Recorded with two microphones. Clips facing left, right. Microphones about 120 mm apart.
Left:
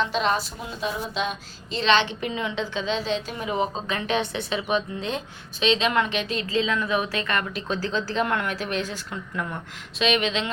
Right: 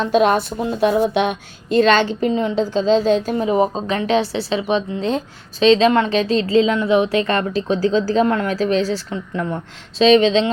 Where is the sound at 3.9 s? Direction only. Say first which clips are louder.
Right 8 dB; 30° right (ahead or behind).